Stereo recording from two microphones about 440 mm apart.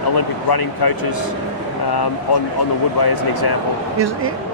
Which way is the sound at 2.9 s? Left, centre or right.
Left.